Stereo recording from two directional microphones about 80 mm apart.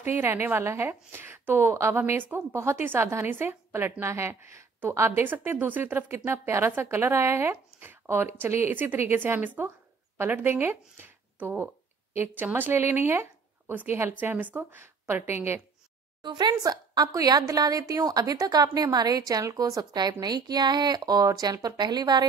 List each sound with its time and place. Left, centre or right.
0.1 s a woman's voice: right
14.8 s a woman's voice: right
16.2 s speech: right